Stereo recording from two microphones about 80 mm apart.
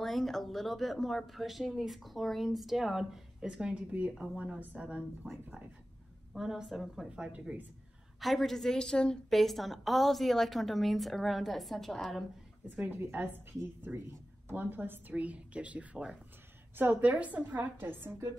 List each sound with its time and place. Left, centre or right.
0.0 s a woman's voice: centre
5.2 s a woman's voice: centre
7.1 s a woman's voice: centre
8.2 s a woman's voice: centre
12.6 s a woman's voice: right